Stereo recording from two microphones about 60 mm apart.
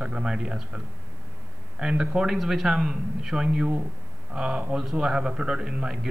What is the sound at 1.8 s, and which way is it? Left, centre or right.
A man's voice, centre.